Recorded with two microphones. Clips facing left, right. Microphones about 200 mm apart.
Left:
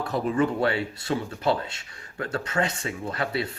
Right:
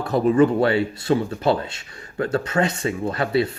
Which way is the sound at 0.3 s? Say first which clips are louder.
Right 6 dB; 30° right (ahead or behind).